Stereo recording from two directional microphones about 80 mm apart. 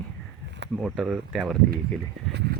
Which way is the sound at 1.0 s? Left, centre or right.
Centre.